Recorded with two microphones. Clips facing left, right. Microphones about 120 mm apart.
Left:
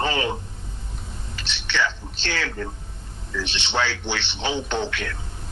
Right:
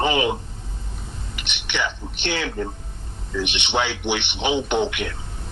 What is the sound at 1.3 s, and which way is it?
A man's voice, 15° right (ahead or behind).